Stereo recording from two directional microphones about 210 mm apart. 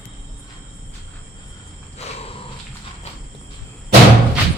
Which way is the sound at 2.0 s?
30° left (ahead or behind).